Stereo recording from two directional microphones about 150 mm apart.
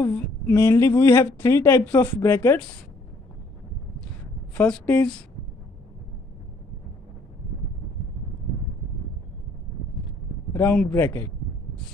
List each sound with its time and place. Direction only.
0.0 s a woman's voice: 15° left (ahead or behind)
4.6 s a woman's voice: 10° left (ahead or behind)
10.5 s a woman's voice: 10° left (ahead or behind)